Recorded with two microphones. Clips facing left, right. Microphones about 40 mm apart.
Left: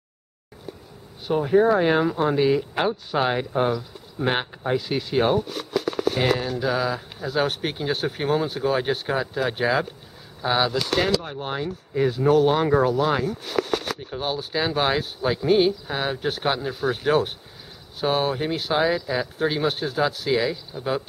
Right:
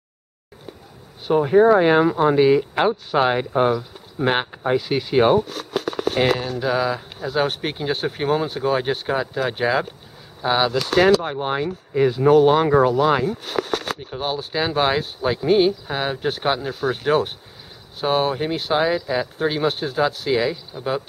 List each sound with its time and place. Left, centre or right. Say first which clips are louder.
1.2 s speech: right 4 dB; centre
10.8 s speech: right 7 dB; right
11.3 s speech: right 5 dB; right
14.1 s speech: right 2 dB; centre